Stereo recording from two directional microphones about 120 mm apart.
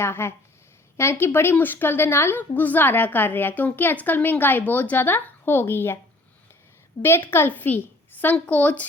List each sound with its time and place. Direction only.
0.0 s a woman's voice: 20° left (ahead or behind)
7.0 s a woman's voice: 20° left (ahead or behind)